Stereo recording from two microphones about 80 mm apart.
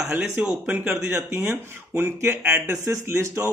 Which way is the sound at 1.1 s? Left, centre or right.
Right.